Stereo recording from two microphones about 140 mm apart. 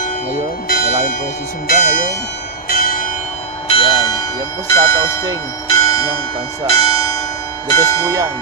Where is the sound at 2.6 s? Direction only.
85° left.